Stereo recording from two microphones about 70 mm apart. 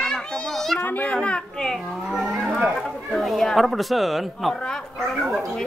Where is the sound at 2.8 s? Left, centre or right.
Centre.